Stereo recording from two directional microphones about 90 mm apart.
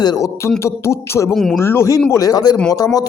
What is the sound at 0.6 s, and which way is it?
Speech, 30° left (ahead or behind).